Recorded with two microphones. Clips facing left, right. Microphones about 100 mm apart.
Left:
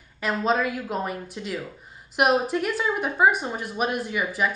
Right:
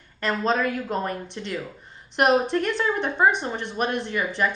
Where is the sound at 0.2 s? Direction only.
5° left (ahead or behind).